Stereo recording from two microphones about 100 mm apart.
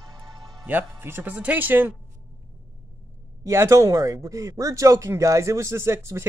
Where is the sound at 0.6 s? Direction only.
15° right (ahead or behind).